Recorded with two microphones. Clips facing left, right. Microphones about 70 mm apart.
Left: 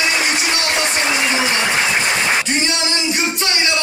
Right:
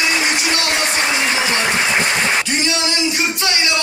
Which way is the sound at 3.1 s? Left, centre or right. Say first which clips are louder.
Even; left.